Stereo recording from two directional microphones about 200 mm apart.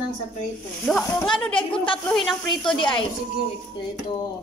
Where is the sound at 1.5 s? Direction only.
25° left (ahead or behind).